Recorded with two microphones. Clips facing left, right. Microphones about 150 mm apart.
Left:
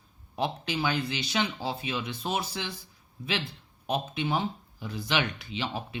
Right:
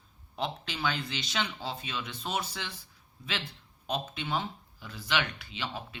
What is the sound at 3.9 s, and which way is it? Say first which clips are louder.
Speech: left 4 dB; 10° left (ahead or behind).